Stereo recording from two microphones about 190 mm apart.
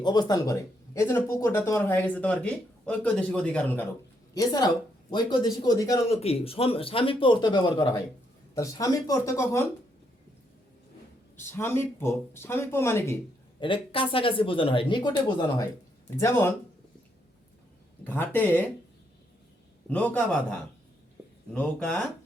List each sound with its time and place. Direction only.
0.0 s speech: 20° left (ahead or behind)
4.4 s speech: 20° left (ahead or behind)
6.1 s speech: 30° left (ahead or behind); by 9.6 s 15° left (ahead or behind)
11.3 s speech: 10° left (ahead or behind)
13.6 s speech: 25° left (ahead or behind)
18.0 s speech: 10° left (ahead or behind)
19.9 s speech: 5° left (ahead or behind)